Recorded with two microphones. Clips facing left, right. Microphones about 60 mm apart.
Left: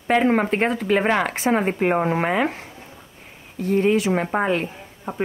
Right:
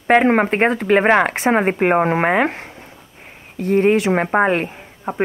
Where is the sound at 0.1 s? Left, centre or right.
Right.